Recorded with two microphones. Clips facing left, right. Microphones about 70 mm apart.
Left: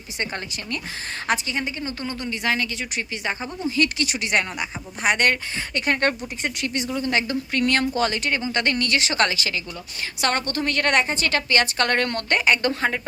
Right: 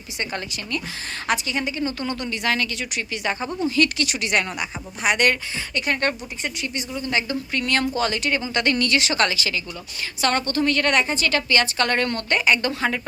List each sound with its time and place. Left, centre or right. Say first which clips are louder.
0.2 s a woman's voice: even; left
6.4 s a woman's voice: left 3 dB; left